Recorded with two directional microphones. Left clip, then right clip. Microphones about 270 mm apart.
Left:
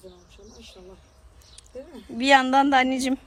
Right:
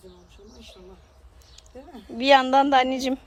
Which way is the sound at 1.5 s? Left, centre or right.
Centre.